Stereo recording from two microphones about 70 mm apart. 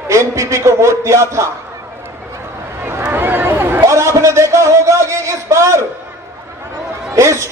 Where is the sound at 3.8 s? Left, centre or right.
Right.